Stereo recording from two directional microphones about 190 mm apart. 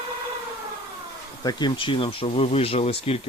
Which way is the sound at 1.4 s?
25° left (ahead or behind).